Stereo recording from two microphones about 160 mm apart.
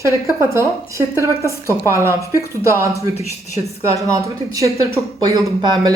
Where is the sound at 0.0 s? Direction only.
15° right (ahead or behind).